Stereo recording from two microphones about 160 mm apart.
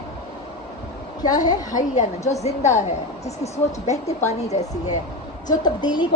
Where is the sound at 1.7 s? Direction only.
50° left (ahead or behind).